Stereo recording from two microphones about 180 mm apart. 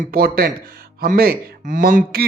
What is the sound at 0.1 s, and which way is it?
Speech, 55° right (ahead or behind).